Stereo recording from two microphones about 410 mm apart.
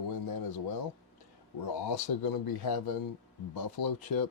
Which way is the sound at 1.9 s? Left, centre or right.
Left.